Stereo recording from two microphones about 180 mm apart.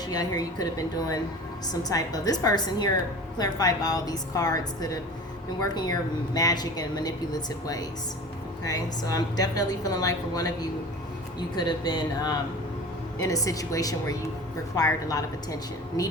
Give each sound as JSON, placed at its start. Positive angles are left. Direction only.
{"t": 0.0, "sound": "a woman's voice", "side_deg": 20}